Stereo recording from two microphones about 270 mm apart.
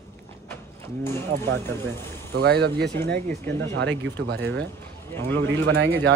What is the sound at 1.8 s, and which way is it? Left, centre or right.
Speech, right.